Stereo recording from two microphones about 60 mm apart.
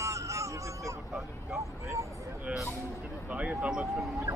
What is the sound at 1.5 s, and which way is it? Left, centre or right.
Vehicle, right.